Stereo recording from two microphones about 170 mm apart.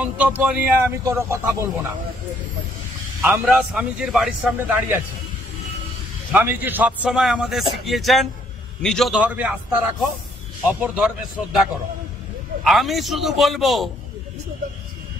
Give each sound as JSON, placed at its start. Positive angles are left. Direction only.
{"t": 0.0, "sound": "a man's voice", "side_deg": -5}
{"t": 3.2, "sound": "a man's voice", "side_deg": -10}
{"t": 6.3, "sound": "a man's voice", "side_deg": -10}
{"t": 12.6, "sound": "a man's voice", "side_deg": 0}